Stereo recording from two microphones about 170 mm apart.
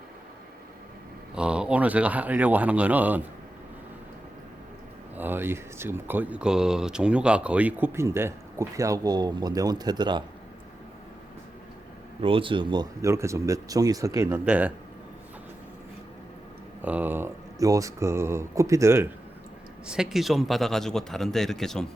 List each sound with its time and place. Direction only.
1.4 s speech: 5° right (ahead or behind)
5.1 s speech: 10° right (ahead or behind)
12.2 s speech: 30° right (ahead or behind); by 14.7 s 10° right (ahead or behind)
16.8 s speech: 10° right (ahead or behind)
19.9 s a man's voice: 5° right (ahead or behind)